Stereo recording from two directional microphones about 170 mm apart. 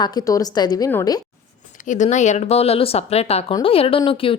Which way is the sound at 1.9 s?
45° left (ahead or behind).